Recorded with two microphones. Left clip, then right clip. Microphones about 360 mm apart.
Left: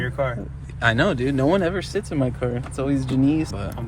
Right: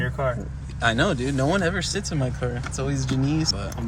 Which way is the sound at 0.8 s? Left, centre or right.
Left.